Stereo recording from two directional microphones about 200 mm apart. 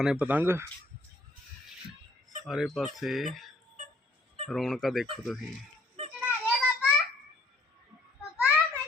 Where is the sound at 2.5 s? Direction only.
Centre (ahead or behind).